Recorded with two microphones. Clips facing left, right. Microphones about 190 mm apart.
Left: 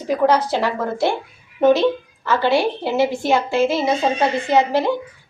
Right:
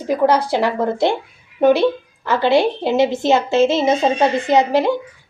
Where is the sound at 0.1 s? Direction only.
10° right (ahead or behind).